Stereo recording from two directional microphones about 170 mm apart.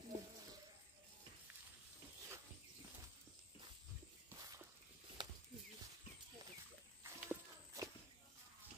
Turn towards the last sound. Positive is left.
turn(degrees=-15)  # may be behind; listen again after turning